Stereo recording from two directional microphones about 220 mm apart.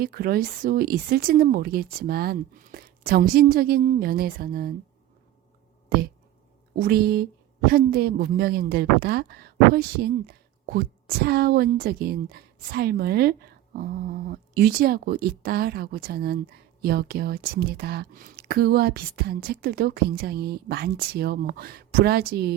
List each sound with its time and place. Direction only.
0.0 s a woman's voice: 45° right (ahead or behind)
6.7 s a woman's voice: 45° right (ahead or behind)